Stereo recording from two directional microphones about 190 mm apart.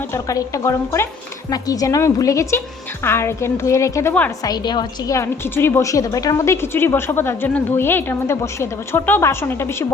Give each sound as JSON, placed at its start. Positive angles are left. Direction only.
{"t": 0.1, "sound": "a woman's voice", "side_deg": 15}
{"t": 4.4, "sound": "a woman's voice", "side_deg": 20}